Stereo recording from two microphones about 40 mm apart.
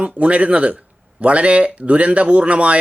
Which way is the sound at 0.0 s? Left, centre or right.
Right.